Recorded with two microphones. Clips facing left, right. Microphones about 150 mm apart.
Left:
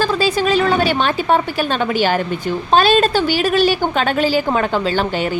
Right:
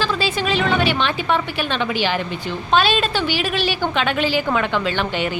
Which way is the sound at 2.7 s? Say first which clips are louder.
Left 5 dB; 45° left (ahead or behind).